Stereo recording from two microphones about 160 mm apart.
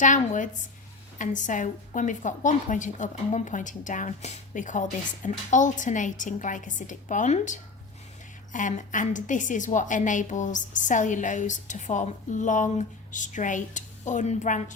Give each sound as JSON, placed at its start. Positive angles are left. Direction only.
{"t": 0.0, "sound": "a woman's voice", "side_deg": 50}